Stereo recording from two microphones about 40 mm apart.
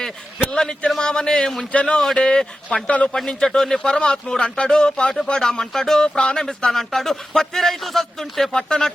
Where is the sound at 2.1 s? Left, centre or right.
Centre.